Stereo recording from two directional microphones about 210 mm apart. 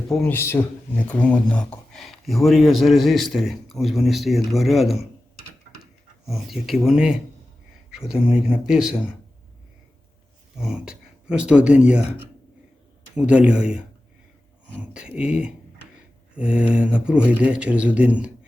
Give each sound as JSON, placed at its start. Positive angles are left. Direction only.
{"t": 0.1, "sound": "speech", "side_deg": 0}
{"t": 0.3, "sound": "speech", "side_deg": 10}
{"t": 10.6, "sound": "speech", "side_deg": -5}
{"t": 14.9, "sound": "speech", "side_deg": -5}